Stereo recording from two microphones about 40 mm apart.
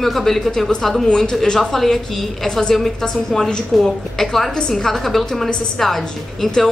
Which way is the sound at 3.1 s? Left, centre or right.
Centre.